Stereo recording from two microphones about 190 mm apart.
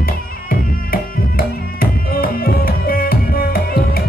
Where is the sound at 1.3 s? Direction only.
50° left (ahead or behind).